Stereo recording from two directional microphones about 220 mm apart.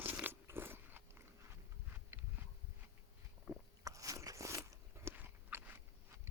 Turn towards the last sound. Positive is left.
turn(degrees=-10)  # may be behind; listen again after turning